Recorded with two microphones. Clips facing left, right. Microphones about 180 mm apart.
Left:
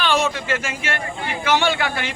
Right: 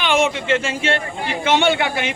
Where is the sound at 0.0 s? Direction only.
20° right (ahead or behind).